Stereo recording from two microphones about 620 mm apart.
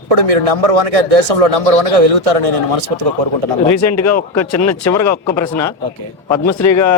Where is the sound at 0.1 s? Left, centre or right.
Right.